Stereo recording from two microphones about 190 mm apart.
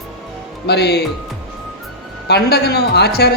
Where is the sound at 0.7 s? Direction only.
60° left (ahead or behind).